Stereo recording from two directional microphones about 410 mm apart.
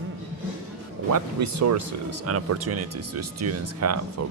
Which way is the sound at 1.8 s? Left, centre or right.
Right.